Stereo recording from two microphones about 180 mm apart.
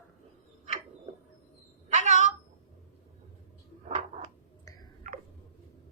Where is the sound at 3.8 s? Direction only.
35° right (ahead or behind).